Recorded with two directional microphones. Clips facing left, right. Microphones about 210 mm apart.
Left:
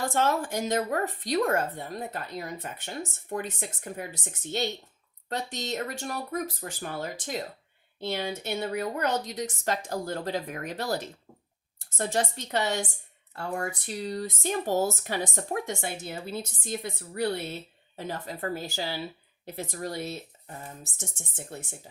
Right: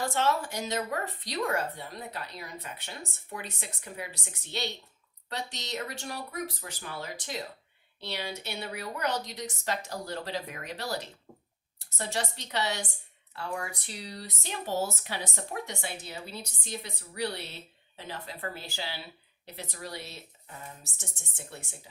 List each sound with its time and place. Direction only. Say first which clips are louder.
0.1 s speech: left 2 dB; 50° left (ahead or behind)